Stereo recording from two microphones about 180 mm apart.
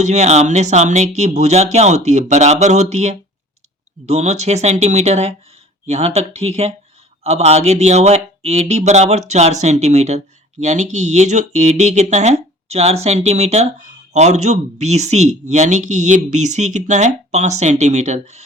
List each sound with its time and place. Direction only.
0.0 s speech: 40° right (ahead or behind)